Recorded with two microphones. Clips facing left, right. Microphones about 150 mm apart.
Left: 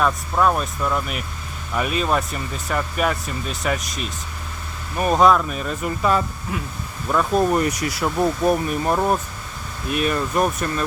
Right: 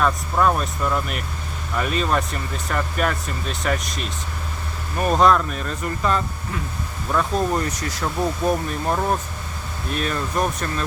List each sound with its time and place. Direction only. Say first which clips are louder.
0.0 s speech: even; 5° left (ahead or behind)